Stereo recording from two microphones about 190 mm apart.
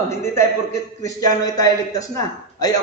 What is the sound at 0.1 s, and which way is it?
A man's voice, 15° left (ahead or behind).